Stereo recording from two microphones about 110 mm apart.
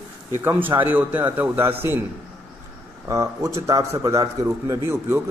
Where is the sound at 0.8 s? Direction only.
15° right (ahead or behind).